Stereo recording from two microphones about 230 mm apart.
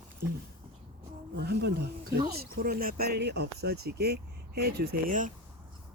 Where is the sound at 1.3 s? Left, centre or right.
Right.